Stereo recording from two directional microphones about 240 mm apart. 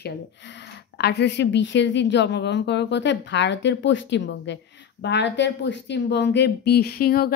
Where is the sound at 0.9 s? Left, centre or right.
Left.